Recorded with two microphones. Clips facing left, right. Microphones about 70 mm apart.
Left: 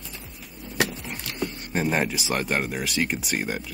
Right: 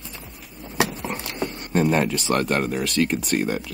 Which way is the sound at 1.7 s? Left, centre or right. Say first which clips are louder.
Right 5 dB; centre.